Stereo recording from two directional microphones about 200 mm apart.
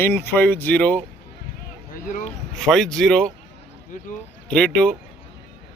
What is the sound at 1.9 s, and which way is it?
Speech, 40° left (ahead or behind).